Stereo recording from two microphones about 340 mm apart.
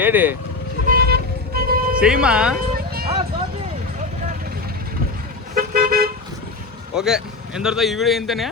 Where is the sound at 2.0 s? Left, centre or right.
Centre.